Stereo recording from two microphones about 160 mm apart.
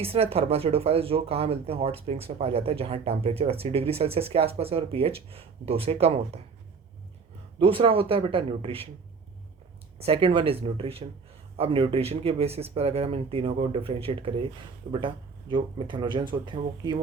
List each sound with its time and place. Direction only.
0.0 s speech: 35° right (ahead or behind)
7.6 s speech: 35° right (ahead or behind)
10.0 s speech: 35° right (ahead or behind)